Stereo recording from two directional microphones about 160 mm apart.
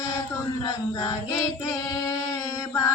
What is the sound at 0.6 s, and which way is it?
Singing, 20° left (ahead or behind).